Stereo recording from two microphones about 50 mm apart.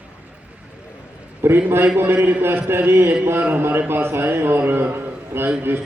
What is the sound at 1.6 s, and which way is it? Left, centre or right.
Speech, right.